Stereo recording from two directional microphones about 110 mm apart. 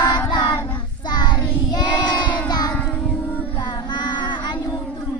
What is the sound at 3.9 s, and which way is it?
Child singing, 45° left (ahead or behind).